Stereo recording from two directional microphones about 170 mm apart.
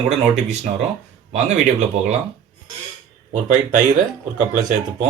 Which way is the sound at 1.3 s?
40° right (ahead or behind).